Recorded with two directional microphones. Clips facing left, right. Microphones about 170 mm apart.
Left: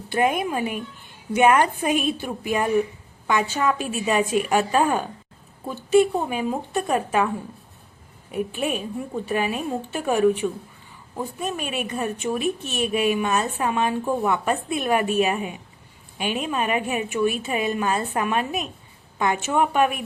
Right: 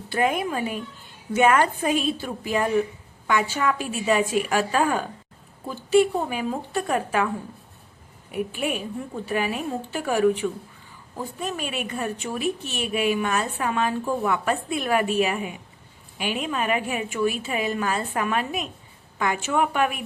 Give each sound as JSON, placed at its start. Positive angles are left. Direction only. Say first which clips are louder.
{"t": 0.1, "sound": "a woman's voice", "louder": "left 2 dB", "side_deg": 20}
{"t": 8.3, "sound": "a woman's voice", "louder": "left 1 dB", "side_deg": 25}